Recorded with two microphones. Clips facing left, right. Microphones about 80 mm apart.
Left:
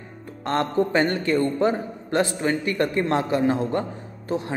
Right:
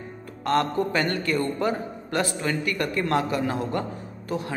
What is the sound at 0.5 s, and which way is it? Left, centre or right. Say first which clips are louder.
A man's voice: left 1 dB; left.